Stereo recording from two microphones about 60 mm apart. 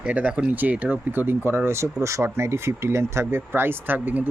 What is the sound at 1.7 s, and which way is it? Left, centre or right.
Speech, right.